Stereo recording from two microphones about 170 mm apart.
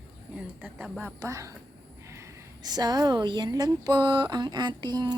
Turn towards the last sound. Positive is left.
turn(degrees=-25)  # may be behind; listen again after turning